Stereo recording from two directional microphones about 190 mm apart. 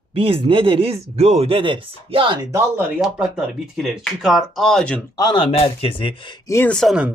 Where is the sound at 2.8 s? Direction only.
5° right (ahead or behind).